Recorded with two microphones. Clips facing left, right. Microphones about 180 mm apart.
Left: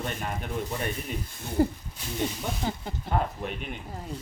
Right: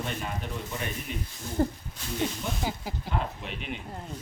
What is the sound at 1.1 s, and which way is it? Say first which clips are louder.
Speech: left 1 dB; 45° left (ahead or behind).